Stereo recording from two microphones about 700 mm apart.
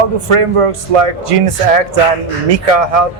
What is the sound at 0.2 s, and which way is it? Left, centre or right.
Speech, right.